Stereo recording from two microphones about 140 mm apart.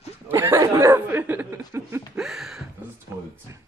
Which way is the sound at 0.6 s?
20° right (ahead or behind).